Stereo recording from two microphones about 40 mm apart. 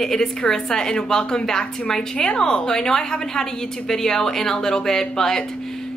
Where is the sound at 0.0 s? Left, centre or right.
Centre.